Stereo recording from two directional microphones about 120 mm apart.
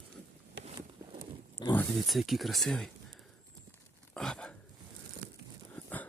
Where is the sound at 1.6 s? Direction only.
40° left (ahead or behind).